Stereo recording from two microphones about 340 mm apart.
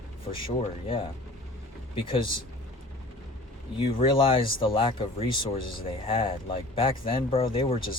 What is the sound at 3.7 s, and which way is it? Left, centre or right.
Speech, centre.